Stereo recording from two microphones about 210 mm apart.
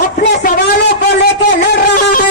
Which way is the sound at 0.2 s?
50° left (ahead or behind).